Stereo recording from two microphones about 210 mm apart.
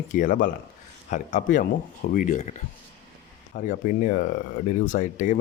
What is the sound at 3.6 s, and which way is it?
Speech, 40° left (ahead or behind).